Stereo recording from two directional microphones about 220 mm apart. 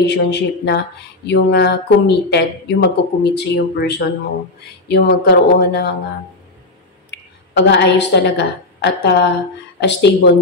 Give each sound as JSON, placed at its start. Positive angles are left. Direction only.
{"t": 0.0, "sound": "speech", "side_deg": 50}
{"t": 7.1, "sound": "a woman's voice", "side_deg": 50}